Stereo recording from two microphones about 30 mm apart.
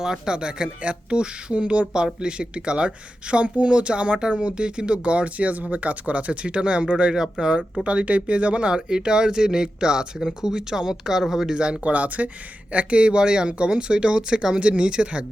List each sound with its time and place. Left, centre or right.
0.0 s speech: centre
0.3 s speech: right
6.9 s speech: right
7.9 s speech: right
10.2 s speech: centre
10.5 s speech: right
11.5 s speech: right
11.8 s speech: right
12.7 s speech: right
14.6 s speech: right